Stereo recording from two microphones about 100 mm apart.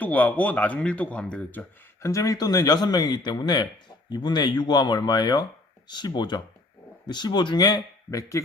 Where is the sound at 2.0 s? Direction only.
35° left (ahead or behind).